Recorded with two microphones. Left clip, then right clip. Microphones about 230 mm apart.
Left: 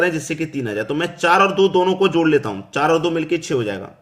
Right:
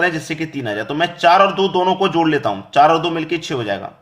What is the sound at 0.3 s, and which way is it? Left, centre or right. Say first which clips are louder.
A man's voice: right 1 dB; centre.